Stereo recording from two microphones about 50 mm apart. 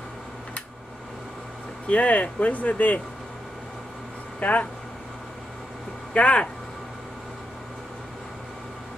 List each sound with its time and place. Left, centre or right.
1.9 s speech: left
4.4 s speech: left
6.1 s speech: left